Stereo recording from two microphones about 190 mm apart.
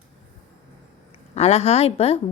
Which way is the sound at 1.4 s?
35° left (ahead or behind).